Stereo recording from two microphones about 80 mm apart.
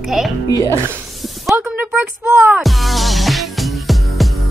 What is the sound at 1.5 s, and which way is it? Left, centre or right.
Speech, centre.